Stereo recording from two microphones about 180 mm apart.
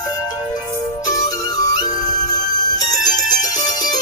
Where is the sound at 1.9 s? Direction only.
45° left (ahead or behind).